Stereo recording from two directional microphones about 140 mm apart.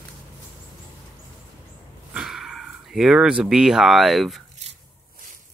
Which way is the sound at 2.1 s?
Centre (ahead or behind).